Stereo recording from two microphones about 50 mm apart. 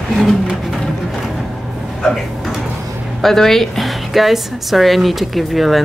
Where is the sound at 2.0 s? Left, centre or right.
Centre.